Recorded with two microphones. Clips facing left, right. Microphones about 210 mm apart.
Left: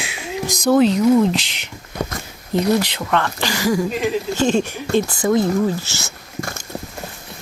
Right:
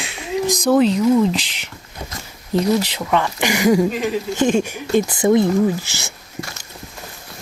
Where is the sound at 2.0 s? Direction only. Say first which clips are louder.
Left 9 dB; 80° left.